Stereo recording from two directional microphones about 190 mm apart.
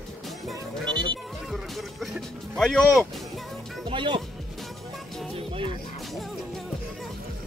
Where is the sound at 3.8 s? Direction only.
25° right (ahead or behind).